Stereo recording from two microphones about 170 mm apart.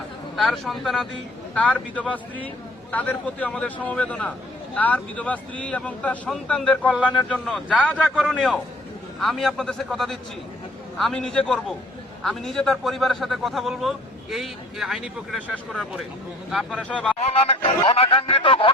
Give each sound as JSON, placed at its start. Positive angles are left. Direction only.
{"t": 0.3, "sound": "a man's voice", "side_deg": 0}
{"t": 17.2, "sound": "speech", "side_deg": 35}